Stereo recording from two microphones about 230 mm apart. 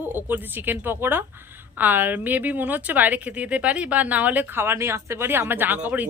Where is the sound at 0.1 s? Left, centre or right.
Centre.